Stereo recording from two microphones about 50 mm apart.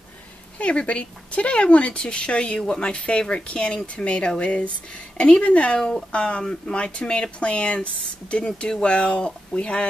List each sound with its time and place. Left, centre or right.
0.6 s speech: left
5.8 s speech: centre